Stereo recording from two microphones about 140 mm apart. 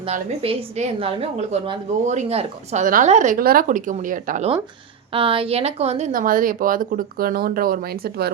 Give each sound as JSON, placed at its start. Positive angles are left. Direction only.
{"t": 0.0, "sound": "a woman's voice", "side_deg": -40}
{"t": 2.8, "sound": "a woman's voice", "side_deg": -70}
{"t": 5.1, "sound": "a woman's voice", "side_deg": -40}
{"t": 6.1, "sound": "speech", "side_deg": -80}